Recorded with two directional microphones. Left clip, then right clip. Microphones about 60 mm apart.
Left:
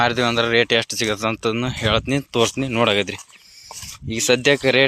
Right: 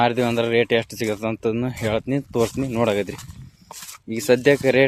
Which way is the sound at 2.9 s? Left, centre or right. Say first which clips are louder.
Left 3 dB; right.